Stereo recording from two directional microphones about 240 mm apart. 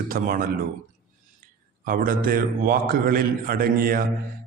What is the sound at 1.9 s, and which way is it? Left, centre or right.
A man's voice, right.